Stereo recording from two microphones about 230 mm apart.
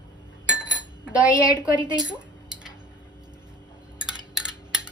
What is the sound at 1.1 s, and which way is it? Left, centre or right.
Speech, centre.